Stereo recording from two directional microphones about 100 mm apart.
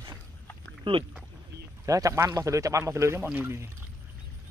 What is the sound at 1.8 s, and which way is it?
Speech, 35° right (ahead or behind).